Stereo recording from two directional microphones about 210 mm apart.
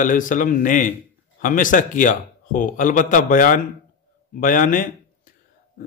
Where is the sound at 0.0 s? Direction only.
40° left (ahead or behind).